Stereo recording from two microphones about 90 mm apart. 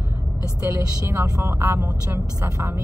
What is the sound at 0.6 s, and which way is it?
A woman's voice, 40° right (ahead or behind).